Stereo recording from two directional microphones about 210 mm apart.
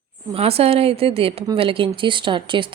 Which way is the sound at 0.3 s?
30° right (ahead or behind).